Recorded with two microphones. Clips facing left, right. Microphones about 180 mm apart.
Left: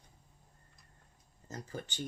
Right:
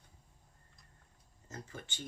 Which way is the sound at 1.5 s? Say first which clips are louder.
Left 5 dB; 35° left (ahead or behind).